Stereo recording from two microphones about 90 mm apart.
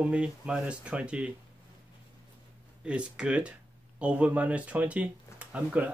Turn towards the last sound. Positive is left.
turn(degrees=-15)  # may be behind; listen again after turning